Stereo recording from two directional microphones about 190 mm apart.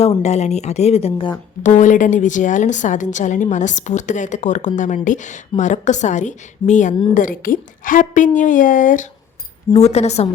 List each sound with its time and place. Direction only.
0.0 s a woman's voice: 35° left (ahead or behind)